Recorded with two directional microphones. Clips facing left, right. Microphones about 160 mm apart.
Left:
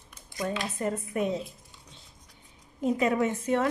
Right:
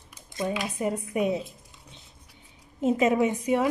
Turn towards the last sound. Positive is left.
turn(degrees=-15)  # may be behind; listen again after turning